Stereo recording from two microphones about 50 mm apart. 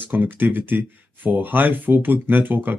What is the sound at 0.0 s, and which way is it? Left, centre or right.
Speech, right.